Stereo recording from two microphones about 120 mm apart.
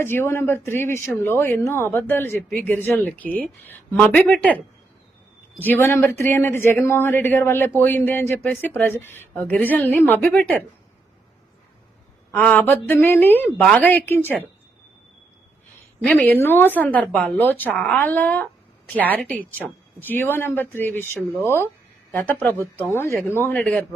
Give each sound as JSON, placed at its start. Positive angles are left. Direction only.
{"t": 0.0, "sound": "speech", "side_deg": 20}
{"t": 5.6, "sound": "speech", "side_deg": 15}
{"t": 12.3, "sound": "speech", "side_deg": 15}
{"t": 16.0, "sound": "speech", "side_deg": 10}